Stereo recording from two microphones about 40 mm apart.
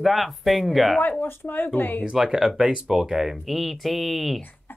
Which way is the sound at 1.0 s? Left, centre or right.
Left.